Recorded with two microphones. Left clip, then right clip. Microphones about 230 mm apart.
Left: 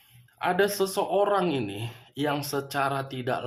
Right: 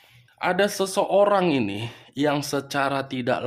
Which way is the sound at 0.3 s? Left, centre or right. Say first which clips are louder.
Right 2 dB; right.